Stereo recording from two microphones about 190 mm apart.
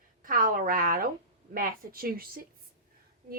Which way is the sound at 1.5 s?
50° right (ahead or behind).